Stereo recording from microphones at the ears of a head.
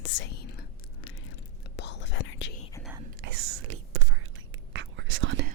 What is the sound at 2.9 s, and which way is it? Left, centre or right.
Whispering, right.